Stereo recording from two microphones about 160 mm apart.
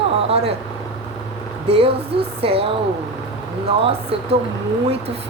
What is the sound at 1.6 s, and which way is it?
A woman's voice, 40° right (ahead or behind).